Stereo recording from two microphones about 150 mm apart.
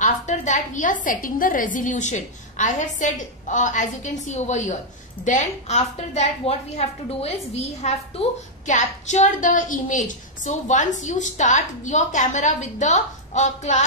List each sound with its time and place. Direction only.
0.0 s a woman's voice: 55° left (ahead or behind)